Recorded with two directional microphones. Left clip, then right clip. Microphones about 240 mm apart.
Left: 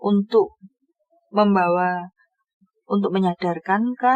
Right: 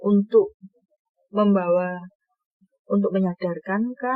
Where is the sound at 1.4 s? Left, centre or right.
Left.